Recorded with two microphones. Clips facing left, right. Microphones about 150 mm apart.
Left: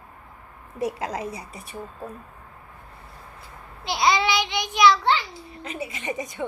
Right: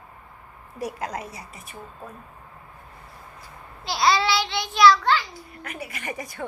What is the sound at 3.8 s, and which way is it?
A child's voice, 20° left (ahead or behind).